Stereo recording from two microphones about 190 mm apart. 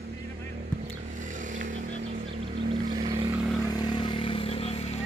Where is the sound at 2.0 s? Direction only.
30° right (ahead or behind).